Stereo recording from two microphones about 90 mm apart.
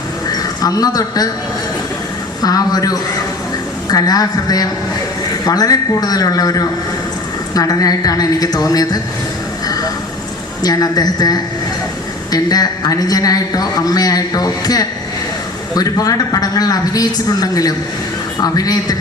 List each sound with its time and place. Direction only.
0.3 s speech: 45° left (ahead or behind)
2.4 s a man's voice: 45° left (ahead or behind)
10.6 s a man's voice: 45° left (ahead or behind)